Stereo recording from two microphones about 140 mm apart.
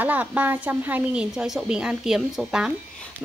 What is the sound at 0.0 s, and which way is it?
A woman's voice, 10° right (ahead or behind).